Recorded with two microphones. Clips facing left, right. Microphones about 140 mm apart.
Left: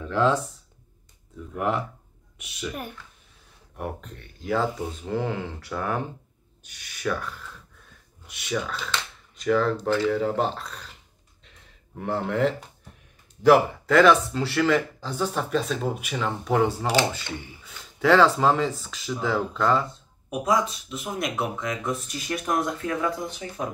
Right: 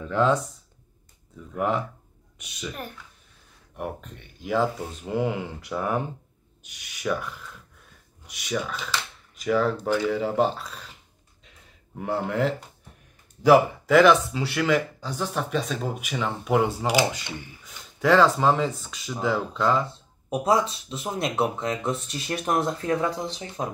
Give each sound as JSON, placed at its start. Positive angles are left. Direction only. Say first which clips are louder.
{"t": 0.0, "sound": "speech", "louder": "even", "side_deg": 0}
{"t": 1.5, "sound": "speech", "louder": "right 1 dB", "side_deg": 0}
{"t": 12.0, "sound": "speech", "louder": "left 1 dB", "side_deg": -5}
{"t": 17.6, "sound": "speech", "louder": "left 1 dB", "side_deg": 0}
{"t": 20.2, "sound": "speech", "louder": "right 2 dB", "side_deg": -30}